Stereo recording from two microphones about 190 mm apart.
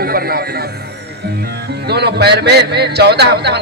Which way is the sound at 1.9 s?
60° right (ahead or behind).